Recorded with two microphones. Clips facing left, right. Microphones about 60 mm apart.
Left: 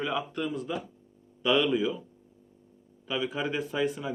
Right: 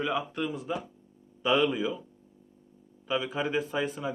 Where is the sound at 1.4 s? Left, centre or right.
Right.